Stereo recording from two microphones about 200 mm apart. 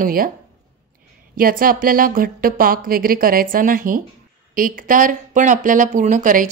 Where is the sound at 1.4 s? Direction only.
45° right (ahead or behind).